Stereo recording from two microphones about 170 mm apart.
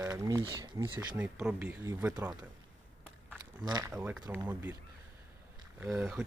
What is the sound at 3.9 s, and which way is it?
Speech, 10° right (ahead or behind).